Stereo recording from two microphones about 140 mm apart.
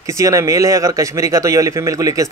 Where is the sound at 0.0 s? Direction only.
20° right (ahead or behind).